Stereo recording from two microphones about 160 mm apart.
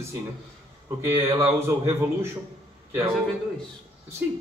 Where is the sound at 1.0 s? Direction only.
15° right (ahead or behind).